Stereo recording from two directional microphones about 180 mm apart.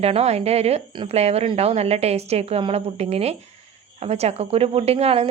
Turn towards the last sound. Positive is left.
turn(degrees=-35)  # may be behind; listen again after turning